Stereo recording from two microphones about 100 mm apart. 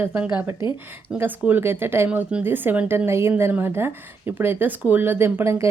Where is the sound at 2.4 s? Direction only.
20° right (ahead or behind).